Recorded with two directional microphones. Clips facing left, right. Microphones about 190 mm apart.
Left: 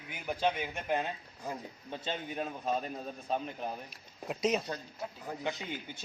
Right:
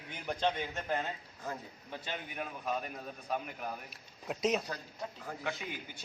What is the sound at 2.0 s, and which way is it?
A man's voice, 25° left (ahead or behind).